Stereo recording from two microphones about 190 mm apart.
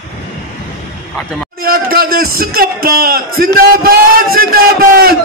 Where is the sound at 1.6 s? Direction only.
50° right (ahead or behind).